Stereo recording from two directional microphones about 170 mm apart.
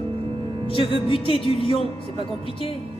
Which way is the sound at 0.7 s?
35° left (ahead or behind).